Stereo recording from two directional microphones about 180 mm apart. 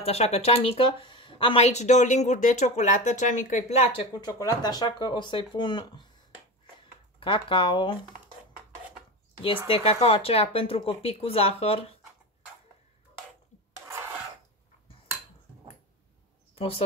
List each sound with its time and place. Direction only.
0.0 s speech: 35° left (ahead or behind)
7.2 s speech: 30° left (ahead or behind)
9.7 s speech: 35° left (ahead or behind)
13.8 s filing: 15° right (ahead or behind)
16.5 s speech: 30° left (ahead or behind)